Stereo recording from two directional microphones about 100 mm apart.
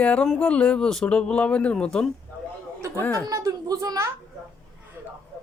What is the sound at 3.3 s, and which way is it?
Speech, 35° right (ahead or behind).